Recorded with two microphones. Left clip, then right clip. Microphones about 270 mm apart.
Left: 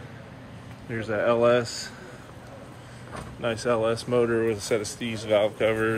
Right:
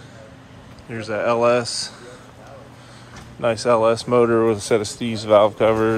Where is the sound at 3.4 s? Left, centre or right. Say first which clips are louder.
Right 8 dB; centre.